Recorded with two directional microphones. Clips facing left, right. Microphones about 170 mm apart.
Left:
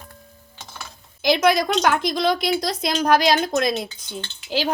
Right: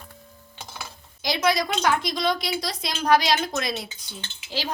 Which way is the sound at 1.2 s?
55° left (ahead or behind).